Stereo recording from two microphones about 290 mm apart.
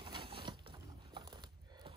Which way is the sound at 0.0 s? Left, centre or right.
Centre.